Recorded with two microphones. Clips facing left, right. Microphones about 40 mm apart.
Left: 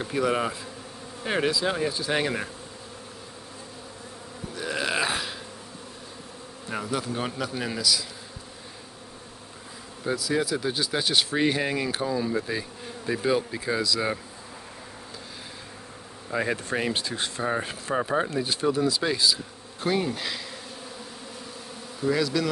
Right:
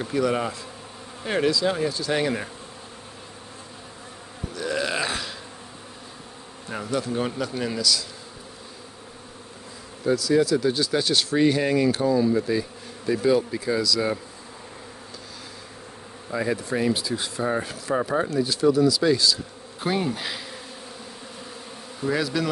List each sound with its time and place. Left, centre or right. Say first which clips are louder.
0.0 s speech: right 1 dB; centre
1.2 s insect: right 2 dB; centre
1.5 s speech: right 2 dB; centre
4.6 s burping: right 1 dB; centre
6.7 s bee: right 2 dB; centre
7.2 s speech: right 3 dB; centre
10.0 s speech: right 6 dB; centre
16.5 s speech: right 3 dB; left
17.4 s speech: right 2 dB; centre
18.3 s speech: right 5 dB; left
19.0 s speech: right 4 dB; centre
19.8 s bee: right 1 dB; centre
22.0 s bee: even; centre